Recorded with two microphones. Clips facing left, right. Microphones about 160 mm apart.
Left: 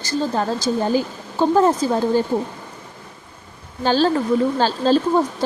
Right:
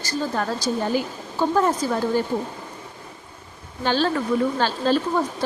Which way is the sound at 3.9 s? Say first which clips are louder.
Left 4 dB; 35° left (ahead or behind).